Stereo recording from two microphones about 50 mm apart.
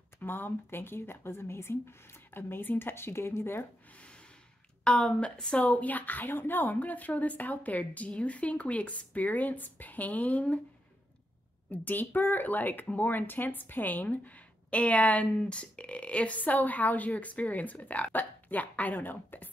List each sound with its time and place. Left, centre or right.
0.2 s speech: left
3.9 s snort: left
4.8 s a woman's voice: centre
5.6 s speech: left
11.7 s speech: left